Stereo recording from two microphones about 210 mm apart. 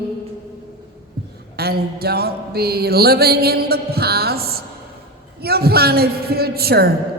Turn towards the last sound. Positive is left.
turn(degrees=-50)  # may be behind; listen again after turning